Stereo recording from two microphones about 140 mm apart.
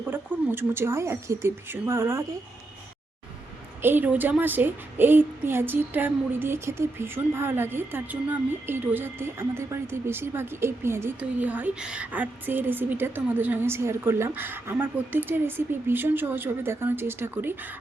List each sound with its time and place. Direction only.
0.0 s a woman's voice: 15° right (ahead or behind)
3.8 s a woman's voice: 15° right (ahead or behind)